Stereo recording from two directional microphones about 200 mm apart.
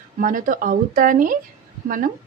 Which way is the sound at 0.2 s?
40° right (ahead or behind).